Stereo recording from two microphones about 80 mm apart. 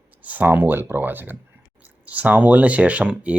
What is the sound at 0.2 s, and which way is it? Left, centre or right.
Speech, centre.